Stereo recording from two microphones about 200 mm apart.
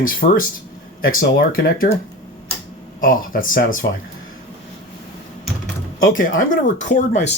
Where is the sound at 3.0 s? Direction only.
45° left (ahead or behind).